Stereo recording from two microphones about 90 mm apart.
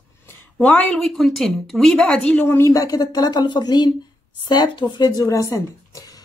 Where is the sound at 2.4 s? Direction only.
30° left (ahead or behind).